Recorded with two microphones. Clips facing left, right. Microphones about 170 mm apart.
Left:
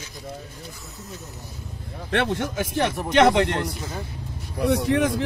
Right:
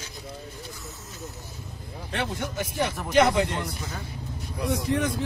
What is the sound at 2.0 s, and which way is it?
Speech, 75° left (ahead or behind).